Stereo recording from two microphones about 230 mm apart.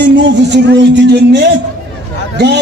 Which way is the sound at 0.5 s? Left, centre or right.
Right.